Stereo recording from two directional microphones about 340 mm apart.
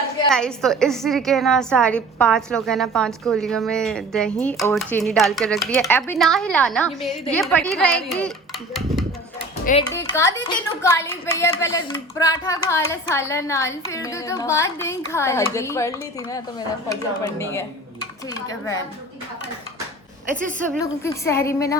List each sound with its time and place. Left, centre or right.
0.3 s a woman's voice: centre
21.0 s speech: centre